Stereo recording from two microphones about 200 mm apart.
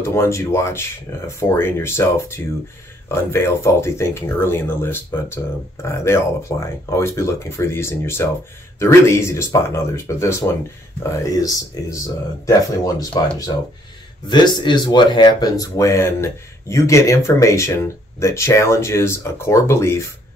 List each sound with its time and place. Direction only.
0.0 s speech: 15° left (ahead or behind)
14.3 s speech: 20° left (ahead or behind)